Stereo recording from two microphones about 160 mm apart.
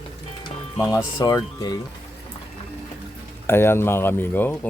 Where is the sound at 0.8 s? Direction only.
20° left (ahead or behind).